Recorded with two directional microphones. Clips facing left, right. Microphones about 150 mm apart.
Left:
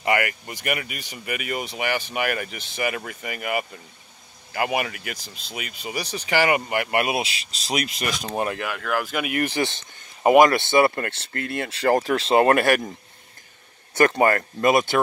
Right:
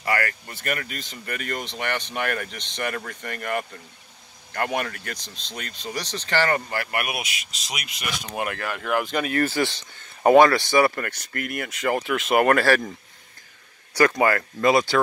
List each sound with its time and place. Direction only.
0.0 s speech: 20° left (ahead or behind); by 7.8 s 35° left (ahead or behind)
8.7 s speech: centre (ahead or behind); by 12.9 s 20° left (ahead or behind)
13.9 s speech: 25° left (ahead or behind)